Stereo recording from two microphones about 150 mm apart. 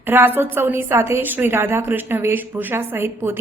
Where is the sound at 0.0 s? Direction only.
15° right (ahead or behind).